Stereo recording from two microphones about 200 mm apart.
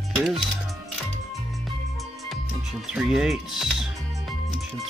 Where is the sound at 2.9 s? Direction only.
5° right (ahead or behind).